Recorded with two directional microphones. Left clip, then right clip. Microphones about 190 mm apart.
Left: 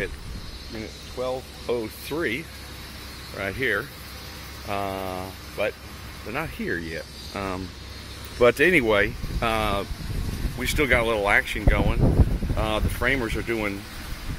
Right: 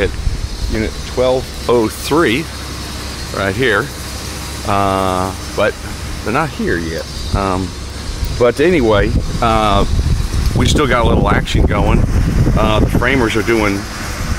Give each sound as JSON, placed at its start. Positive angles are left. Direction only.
{"t": 0.7, "sound": "speech", "side_deg": -25}
{"t": 2.1, "sound": "speech", "side_deg": -10}
{"t": 4.6, "sound": "speech", "side_deg": -15}
{"t": 6.6, "sound": "speech", "side_deg": 20}
{"t": 7.3, "sound": "speech", "side_deg": 5}